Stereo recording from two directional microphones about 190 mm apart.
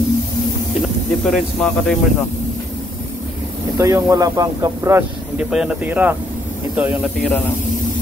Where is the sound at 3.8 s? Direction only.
15° right (ahead or behind).